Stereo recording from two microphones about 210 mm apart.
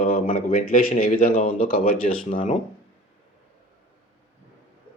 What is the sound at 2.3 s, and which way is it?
Speech, 25° left (ahead or behind).